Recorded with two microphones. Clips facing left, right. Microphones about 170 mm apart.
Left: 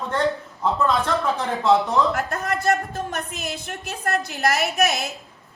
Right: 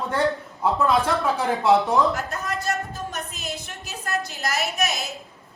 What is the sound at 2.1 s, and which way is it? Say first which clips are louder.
A woman's voice: left 3 dB; 55° left (ahead or behind).